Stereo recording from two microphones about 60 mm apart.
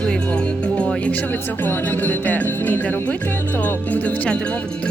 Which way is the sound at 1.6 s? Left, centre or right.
Left.